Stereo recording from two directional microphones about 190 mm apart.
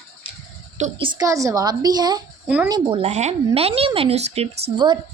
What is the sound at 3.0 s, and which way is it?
A woman's voice, 35° right (ahead or behind).